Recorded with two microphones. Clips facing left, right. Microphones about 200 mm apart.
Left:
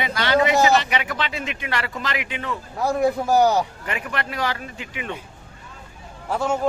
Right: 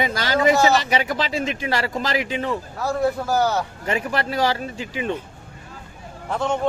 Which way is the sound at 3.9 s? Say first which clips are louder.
Right 5 dB; 35° right (ahead or behind).